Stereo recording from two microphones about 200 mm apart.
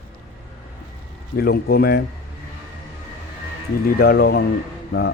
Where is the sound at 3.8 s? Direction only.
50° left (ahead or behind).